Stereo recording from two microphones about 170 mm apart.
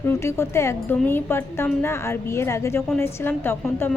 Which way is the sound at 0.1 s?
15° left (ahead or behind).